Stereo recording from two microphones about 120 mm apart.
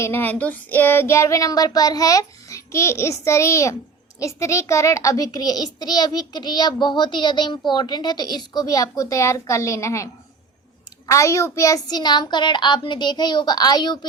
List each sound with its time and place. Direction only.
0.0 s child singing: 15° left (ahead or behind)
4.2 s a child's voice: 25° left (ahead or behind)